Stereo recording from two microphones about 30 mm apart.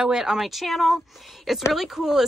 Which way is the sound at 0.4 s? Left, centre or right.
Centre.